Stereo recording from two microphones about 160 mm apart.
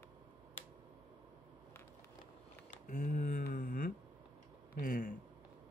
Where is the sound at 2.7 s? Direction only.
55° left (ahead or behind).